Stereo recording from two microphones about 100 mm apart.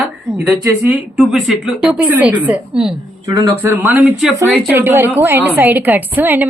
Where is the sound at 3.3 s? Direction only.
35° right (ahead or behind).